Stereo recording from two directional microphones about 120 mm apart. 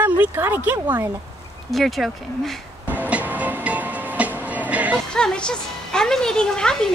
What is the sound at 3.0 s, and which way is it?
Music, 15° right (ahead or behind).